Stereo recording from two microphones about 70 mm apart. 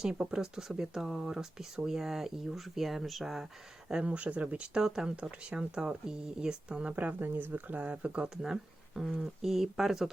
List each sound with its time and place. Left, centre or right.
0.0 s speech: centre
3.8 s speech: centre
6.9 s speech: right; by 10.1 s centre